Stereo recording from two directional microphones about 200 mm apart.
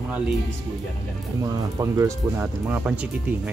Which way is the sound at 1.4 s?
15° right (ahead or behind).